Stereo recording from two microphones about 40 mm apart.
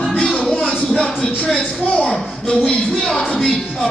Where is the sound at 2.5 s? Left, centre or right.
Left.